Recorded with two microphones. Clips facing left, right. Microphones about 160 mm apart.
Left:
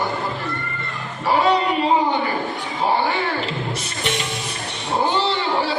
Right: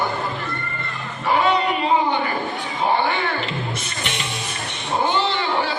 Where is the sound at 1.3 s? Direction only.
35° left (ahead or behind).